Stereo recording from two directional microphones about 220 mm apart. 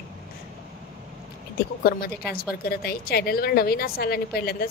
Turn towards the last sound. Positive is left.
turn(degrees=45)  # may be behind; listen again after turning